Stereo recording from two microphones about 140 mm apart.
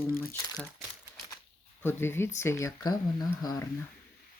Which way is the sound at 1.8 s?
15° left (ahead or behind).